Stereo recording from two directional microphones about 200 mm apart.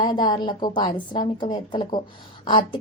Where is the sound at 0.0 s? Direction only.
20° left (ahead or behind).